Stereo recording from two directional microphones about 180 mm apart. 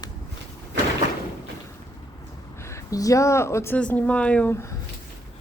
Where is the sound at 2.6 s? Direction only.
15° left (ahead or behind).